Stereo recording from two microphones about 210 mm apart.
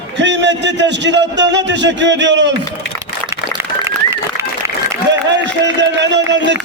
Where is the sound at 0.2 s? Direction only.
55° right (ahead or behind).